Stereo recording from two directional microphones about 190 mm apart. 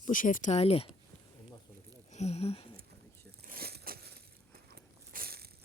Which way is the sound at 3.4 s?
55° right (ahead or behind).